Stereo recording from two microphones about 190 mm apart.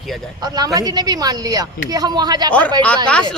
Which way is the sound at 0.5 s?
20° right (ahead or behind).